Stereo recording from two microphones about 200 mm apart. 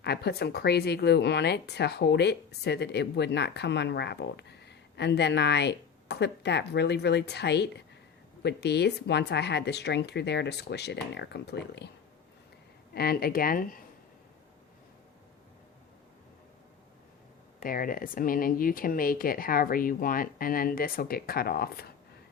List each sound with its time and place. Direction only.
0.0 s speech: 55° left (ahead or behind)
12.9 s speech: 50° left (ahead or behind)
17.6 s speech: 45° left (ahead or behind)